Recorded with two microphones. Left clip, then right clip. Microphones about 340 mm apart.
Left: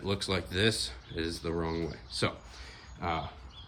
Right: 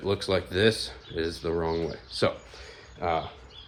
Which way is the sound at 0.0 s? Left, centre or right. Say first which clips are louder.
Right 6 dB; centre.